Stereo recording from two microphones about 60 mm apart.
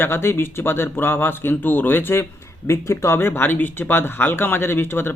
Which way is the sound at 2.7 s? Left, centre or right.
Left.